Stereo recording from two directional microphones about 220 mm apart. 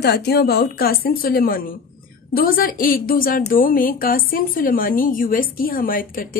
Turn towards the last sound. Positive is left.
turn(degrees=40)  # may be behind; listen again after turning